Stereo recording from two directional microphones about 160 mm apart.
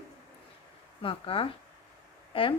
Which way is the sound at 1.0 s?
35° left (ahead or behind).